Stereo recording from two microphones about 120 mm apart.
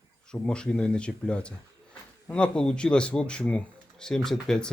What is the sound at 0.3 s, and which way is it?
A man's voice, 10° left (ahead or behind).